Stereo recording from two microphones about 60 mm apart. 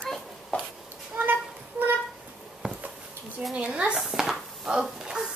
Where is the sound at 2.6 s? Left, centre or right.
Centre.